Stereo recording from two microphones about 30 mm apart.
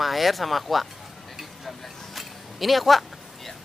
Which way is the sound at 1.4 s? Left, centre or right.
Centre.